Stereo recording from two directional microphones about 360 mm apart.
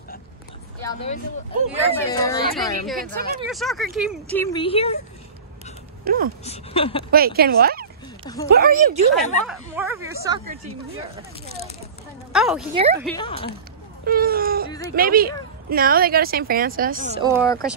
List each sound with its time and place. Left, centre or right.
0.8 s speech: centre
3.0 s a woman's voice: right
3.4 s speech: centre
6.4 s speech: centre
7.1 s a woman's voice: right
9.1 s speech: centre
11.4 s speech: centre
12.3 s a woman's voice: centre
12.7 s speech: centre
13.0 s speech: centre
14.0 s wail: right
15.0 s a woman's voice: right
17.1 s speech: centre
17.4 s speech: centre